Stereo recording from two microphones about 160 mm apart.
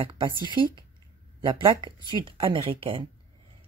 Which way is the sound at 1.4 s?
30° right (ahead or behind).